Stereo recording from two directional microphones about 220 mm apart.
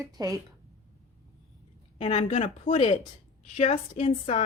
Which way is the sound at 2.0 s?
30° left (ahead or behind).